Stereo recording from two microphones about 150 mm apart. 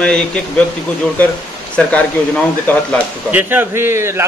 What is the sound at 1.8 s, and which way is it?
Speech, 10° left (ahead or behind).